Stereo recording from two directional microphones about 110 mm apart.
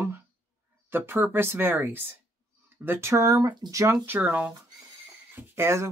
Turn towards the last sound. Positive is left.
turn(degrees=-25)  # may be behind; listen again after turning